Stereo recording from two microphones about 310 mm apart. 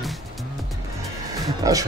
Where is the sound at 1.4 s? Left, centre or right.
Centre.